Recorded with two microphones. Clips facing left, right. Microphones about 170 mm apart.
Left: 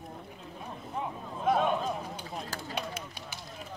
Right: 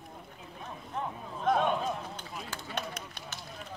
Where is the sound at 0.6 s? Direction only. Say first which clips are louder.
Left 1 dB; 5° left (ahead or behind).